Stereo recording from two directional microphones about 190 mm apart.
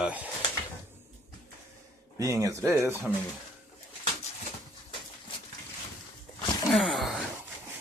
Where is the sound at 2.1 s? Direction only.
15° right (ahead or behind).